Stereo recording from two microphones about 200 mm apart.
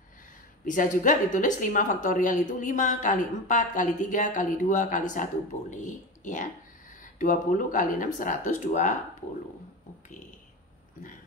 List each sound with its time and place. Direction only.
0.7 s a woman's voice: 40° left (ahead or behind)